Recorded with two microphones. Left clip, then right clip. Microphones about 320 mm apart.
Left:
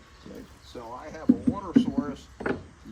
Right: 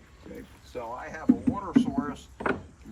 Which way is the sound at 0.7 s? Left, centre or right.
Centre.